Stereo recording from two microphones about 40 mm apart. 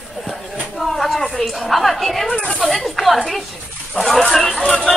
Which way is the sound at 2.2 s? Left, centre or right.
Left.